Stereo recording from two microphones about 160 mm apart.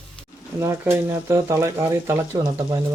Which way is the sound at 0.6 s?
20° right (ahead or behind).